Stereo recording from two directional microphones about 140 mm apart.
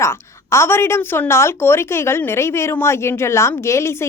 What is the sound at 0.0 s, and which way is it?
A woman's voice, 20° left (ahead or behind).